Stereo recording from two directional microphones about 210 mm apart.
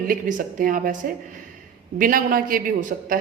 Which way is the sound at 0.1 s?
40° right (ahead or behind).